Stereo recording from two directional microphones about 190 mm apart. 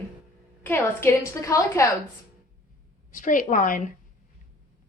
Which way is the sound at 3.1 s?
45° left (ahead or behind).